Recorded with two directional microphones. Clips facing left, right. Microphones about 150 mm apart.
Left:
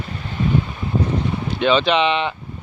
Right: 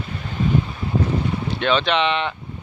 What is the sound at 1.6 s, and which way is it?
Speech, centre (ahead or behind).